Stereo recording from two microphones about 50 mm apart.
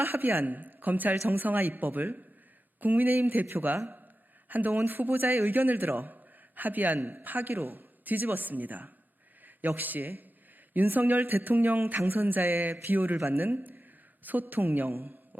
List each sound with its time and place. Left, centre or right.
0.0 s a man's voice: right